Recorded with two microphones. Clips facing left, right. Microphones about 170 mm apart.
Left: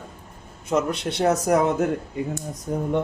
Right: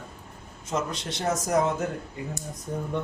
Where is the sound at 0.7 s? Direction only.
60° left (ahead or behind).